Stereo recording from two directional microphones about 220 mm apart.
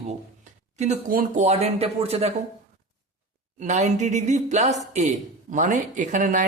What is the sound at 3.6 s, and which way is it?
Speech, 35° right (ahead or behind).